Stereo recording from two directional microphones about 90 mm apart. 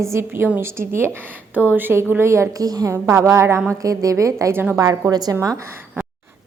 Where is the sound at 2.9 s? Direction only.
30° right (ahead or behind).